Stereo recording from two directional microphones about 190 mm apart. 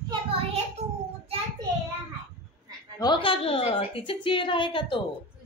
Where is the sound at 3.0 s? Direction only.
25° left (ahead or behind).